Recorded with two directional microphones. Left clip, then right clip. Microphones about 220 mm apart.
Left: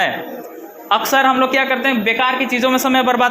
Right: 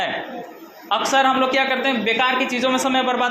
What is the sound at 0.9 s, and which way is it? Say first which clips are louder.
A man's voice: left 3 dB; 30° left (ahead or behind).